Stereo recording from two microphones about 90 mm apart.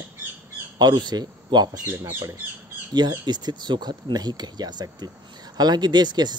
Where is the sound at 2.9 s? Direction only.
50° right (ahead or behind).